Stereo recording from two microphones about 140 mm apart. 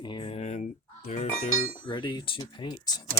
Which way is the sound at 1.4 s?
55° left (ahead or behind).